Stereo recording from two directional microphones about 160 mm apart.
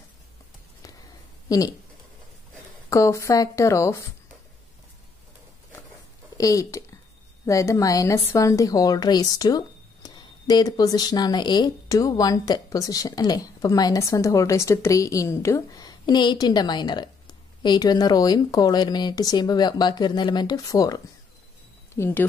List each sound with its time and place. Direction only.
1.5 s a woman's voice: 20° left (ahead or behind)
2.9 s a woman's voice: 20° left (ahead or behind)
6.3 s a woman's voice: 20° left (ahead or behind)